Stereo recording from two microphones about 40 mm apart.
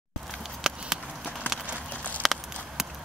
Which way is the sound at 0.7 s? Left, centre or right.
Centre.